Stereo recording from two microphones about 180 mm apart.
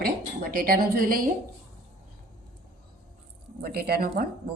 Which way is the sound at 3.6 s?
60° right (ahead or behind).